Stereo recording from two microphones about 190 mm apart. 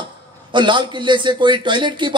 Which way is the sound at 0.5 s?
25° right (ahead or behind).